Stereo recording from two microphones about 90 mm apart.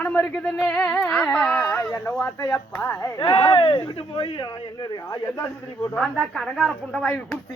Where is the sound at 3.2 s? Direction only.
65° left (ahead or behind).